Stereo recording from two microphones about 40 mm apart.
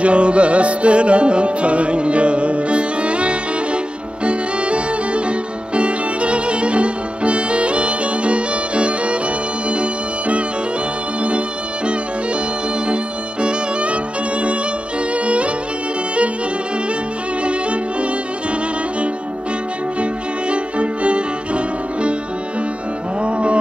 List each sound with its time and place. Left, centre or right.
0.0 s music: right
11.2 s violin: right
12.8 s music: right
15.1 s violin: right
17.4 s violin: right
23.2 s music: right